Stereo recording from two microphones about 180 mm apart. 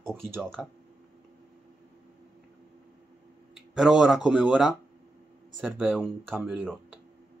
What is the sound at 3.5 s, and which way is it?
Speech, 5° right (ahead or behind).